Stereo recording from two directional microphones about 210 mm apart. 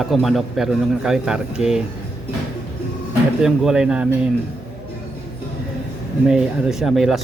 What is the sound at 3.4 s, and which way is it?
Speech, 5° right (ahead or behind).